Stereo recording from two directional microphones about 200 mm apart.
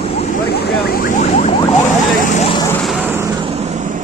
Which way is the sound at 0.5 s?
55° left (ahead or behind).